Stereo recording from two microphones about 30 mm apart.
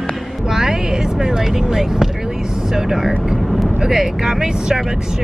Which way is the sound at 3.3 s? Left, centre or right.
Centre.